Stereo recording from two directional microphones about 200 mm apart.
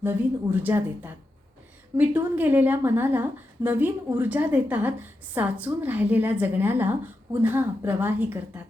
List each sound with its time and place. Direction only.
0.0 s a woman's voice: 10° right (ahead or behind)